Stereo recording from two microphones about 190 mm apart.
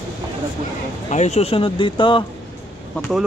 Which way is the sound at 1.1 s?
35° left (ahead or behind).